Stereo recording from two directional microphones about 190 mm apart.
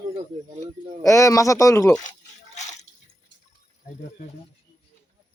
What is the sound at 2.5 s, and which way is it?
Water, 40° left (ahead or behind).